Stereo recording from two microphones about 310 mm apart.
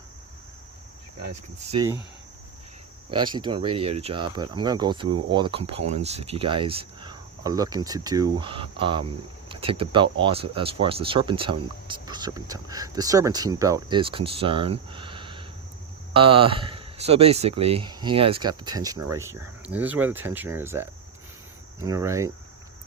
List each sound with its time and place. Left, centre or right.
1.7 s speech: centre
3.1 s speech: centre
21.8 s speech: centre